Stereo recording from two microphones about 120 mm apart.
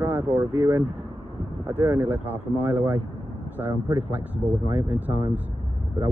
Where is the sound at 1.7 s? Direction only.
15° right (ahead or behind).